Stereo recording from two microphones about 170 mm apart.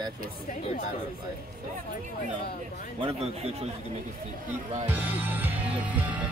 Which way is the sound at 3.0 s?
35° right (ahead or behind).